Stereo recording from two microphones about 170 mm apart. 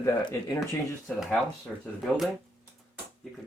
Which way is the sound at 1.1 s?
5° left (ahead or behind).